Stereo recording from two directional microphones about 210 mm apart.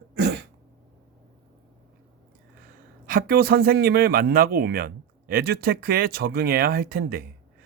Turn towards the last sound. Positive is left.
turn(degrees=-45)  # may be behind; listen again after turning